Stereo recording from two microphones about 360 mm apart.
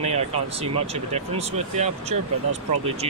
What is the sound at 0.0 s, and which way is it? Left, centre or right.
Speech, centre.